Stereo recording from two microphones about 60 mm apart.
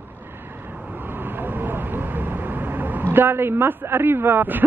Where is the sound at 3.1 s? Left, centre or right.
Right.